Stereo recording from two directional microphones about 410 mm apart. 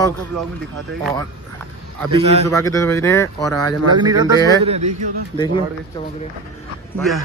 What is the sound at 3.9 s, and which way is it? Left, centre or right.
Speech, centre.